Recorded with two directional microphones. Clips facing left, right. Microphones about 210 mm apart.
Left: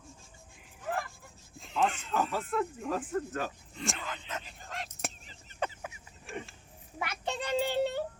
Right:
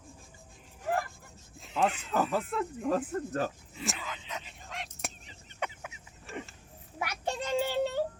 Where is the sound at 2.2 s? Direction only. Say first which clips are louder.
Right 1 dB; centre (ahead or behind).